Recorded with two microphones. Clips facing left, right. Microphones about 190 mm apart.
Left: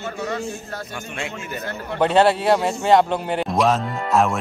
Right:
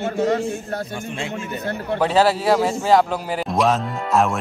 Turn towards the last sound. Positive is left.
turn(degrees=0)  # may be behind; listen again after turning